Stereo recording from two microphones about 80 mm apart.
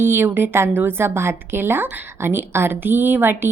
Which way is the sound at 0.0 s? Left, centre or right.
Right.